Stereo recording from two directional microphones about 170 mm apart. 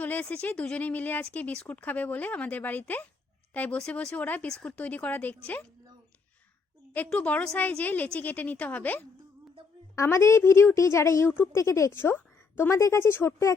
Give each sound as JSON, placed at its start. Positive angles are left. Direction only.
{"t": 0.0, "sound": "speech", "side_deg": 10}
{"t": 6.9, "sound": "a woman's voice", "side_deg": 10}